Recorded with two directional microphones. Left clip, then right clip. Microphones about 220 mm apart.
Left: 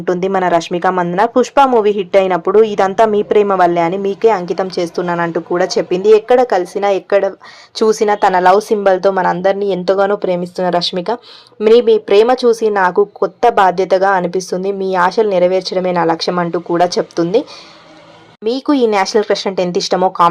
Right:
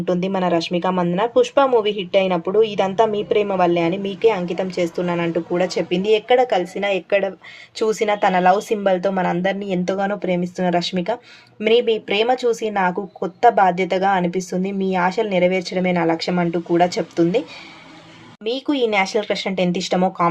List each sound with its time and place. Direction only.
0.0 s speech: 20° left (ahead or behind)
18.4 s speech: 25° left (ahead or behind)